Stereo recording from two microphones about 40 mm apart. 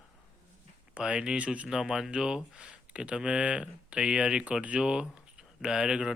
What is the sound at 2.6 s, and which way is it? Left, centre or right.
Speech, right.